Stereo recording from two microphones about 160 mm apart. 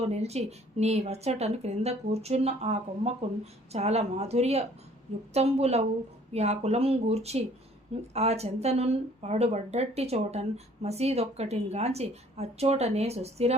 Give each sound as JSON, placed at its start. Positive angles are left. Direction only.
{"t": 0.0, "sound": "speech", "side_deg": -40}